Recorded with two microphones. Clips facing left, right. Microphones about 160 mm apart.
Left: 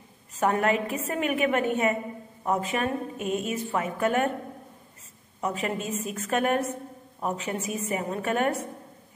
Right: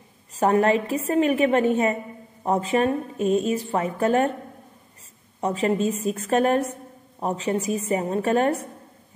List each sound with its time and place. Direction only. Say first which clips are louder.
0.4 s a woman's voice: right 5 dB; 35° right (ahead or behind)
5.4 s a woman's voice: right 7 dB; 30° right (ahead or behind)